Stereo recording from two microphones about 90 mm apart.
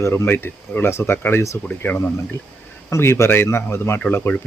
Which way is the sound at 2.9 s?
30° left (ahead or behind).